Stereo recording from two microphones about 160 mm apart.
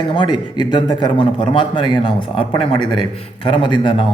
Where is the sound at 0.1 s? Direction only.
30° left (ahead or behind).